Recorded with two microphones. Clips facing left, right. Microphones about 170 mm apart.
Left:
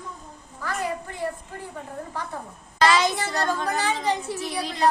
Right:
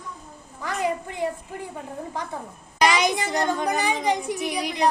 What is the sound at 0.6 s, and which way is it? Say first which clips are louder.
Speech: right 3 dB; 15° right (ahead or behind).